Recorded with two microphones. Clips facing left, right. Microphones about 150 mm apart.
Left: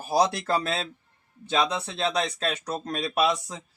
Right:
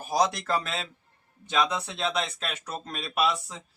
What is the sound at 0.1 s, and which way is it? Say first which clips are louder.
Speech: left 2 dB; 30° left (ahead or behind).